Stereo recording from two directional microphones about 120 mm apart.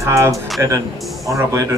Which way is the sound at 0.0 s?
25° right (ahead or behind).